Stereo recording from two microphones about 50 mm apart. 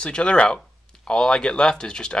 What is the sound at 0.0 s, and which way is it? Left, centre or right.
Speech, centre.